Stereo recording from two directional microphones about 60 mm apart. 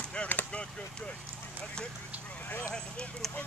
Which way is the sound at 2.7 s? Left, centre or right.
Centre.